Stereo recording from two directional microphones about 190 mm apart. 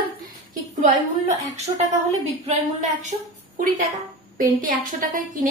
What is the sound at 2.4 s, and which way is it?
A woman's voice, 40° right (ahead or behind).